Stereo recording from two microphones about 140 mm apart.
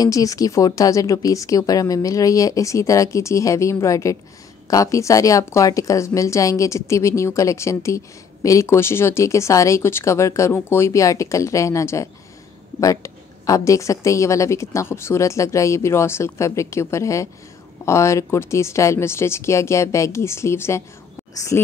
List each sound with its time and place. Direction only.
0.0 s a woman's voice: 25° left (ahead or behind)